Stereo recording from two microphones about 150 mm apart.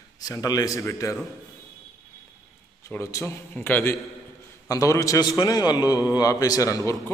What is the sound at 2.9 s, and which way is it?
A man's voice, 15° left (ahead or behind).